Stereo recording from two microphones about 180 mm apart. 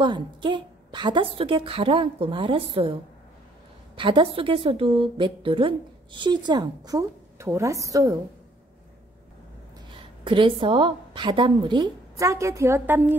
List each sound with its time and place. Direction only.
0.0 s a woman's voice: 25° right (ahead or behind)
9.9 s a woman's voice: 30° right (ahead or behind); by 13.1 s 10° right (ahead or behind)